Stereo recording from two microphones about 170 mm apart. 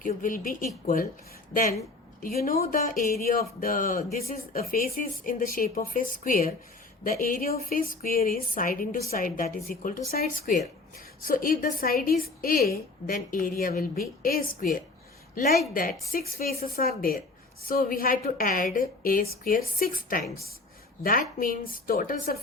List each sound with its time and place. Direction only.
0.0 s speech: 50° left (ahead or behind)
2.2 s a woman's voice: 60° left (ahead or behind)